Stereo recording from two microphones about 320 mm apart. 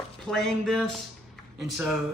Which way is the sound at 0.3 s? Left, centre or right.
Centre.